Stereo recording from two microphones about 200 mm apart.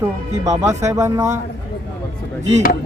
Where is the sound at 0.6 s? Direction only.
15° right (ahead or behind).